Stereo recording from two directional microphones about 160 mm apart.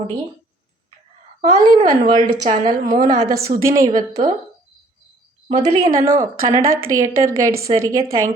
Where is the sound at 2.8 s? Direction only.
25° right (ahead or behind).